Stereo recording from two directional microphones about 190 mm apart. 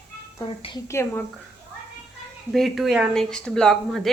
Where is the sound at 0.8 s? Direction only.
15° left (ahead or behind).